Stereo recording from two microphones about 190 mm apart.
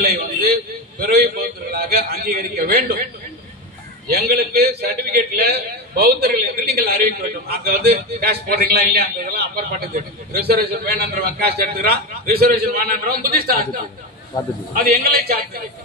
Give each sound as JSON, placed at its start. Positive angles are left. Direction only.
{"t": 0.0, "sound": "a man's voice", "side_deg": -55}
{"t": 4.2, "sound": "a man's voice", "side_deg": -55}
{"t": 14.7, "sound": "a man's voice", "side_deg": -50}